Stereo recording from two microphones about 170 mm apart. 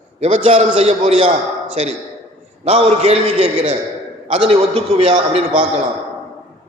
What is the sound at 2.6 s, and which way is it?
A man's voice, 40° right (ahead or behind).